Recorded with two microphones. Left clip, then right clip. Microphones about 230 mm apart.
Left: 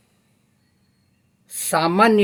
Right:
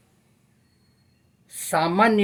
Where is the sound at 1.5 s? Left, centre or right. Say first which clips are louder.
Left 3 dB; left.